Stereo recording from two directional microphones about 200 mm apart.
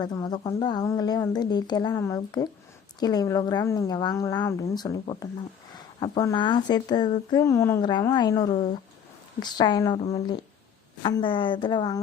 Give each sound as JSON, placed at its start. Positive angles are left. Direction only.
{"t": 0.0, "sound": "speech", "side_deg": 20}